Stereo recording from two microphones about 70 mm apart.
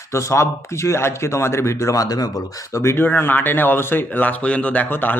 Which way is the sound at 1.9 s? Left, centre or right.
Left.